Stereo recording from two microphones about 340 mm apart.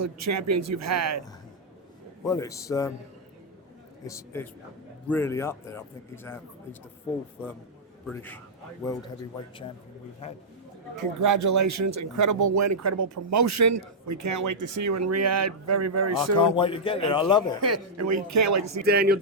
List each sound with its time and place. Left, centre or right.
0.0 s speech: right
2.2 s a man's voice: centre
4.0 s a man's voice: centre
8.0 s a man's voice: centre
10.9 s speech: right
16.6 s a man's voice: centre
17.6 s speech: right
18.9 s speech: right